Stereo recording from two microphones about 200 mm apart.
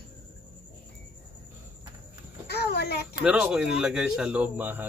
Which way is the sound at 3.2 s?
5° right (ahead or behind).